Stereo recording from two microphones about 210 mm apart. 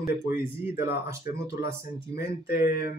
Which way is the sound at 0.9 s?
15° right (ahead or behind).